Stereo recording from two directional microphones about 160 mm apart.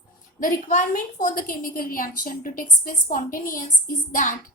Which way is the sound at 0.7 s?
55° left (ahead or behind).